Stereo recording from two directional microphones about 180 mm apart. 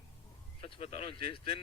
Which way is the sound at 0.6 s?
30° left (ahead or behind).